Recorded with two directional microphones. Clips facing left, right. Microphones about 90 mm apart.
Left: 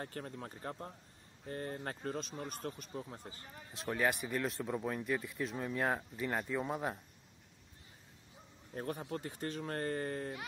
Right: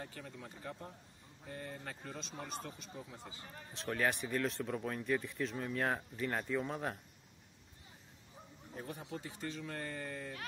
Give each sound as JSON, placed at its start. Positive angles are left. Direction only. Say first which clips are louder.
{"t": 0.0, "sound": "speech", "louder": "left 4 dB", "side_deg": 45}
{"t": 3.5, "sound": "a man's voice", "louder": "left 1 dB", "side_deg": 10}
{"t": 8.7, "sound": "speech", "louder": "left 5 dB", "side_deg": 50}